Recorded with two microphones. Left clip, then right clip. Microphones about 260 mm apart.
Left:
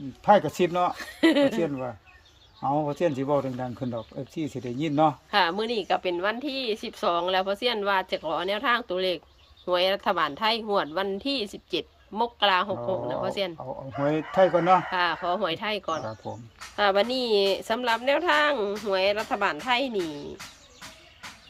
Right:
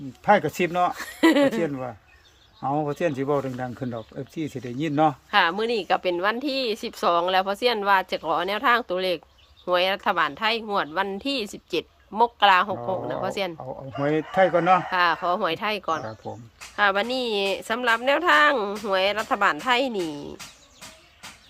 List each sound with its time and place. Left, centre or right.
0.3 s speech: centre